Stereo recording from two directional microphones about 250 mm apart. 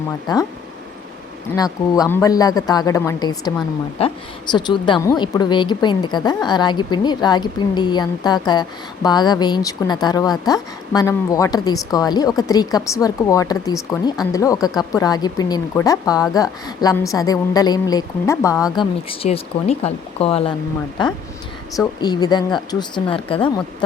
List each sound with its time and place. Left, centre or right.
0.3 s speech: centre
1.5 s speech: centre
22.0 s speech: centre